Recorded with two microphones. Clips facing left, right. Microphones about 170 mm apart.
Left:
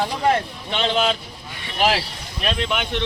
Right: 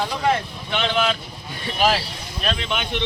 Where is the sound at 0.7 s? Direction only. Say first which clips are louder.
Left 1 dB; 30° left (ahead or behind).